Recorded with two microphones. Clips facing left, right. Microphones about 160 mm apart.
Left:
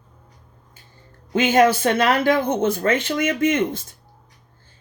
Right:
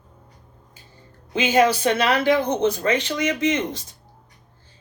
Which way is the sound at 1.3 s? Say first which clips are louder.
Left 2 dB; 50° left (ahead or behind).